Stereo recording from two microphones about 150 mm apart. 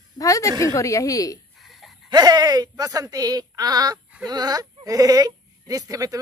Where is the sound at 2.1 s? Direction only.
25° right (ahead or behind).